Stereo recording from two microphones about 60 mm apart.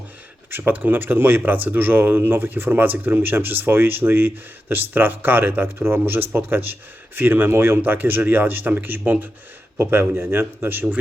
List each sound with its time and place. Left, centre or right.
0.5 s speech: right